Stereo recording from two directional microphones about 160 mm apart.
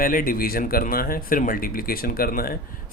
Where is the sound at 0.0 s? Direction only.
60° left (ahead or behind).